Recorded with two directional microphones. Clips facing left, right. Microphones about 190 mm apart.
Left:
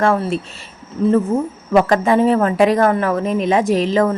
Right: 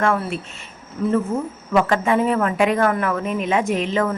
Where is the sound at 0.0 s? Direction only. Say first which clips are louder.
Left 4 dB; 35° left (ahead or behind).